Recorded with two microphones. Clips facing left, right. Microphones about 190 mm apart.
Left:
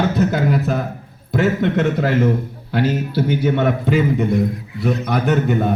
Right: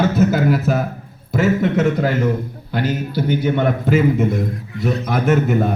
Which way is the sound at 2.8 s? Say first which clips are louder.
Left 2 dB; 30° left (ahead or behind).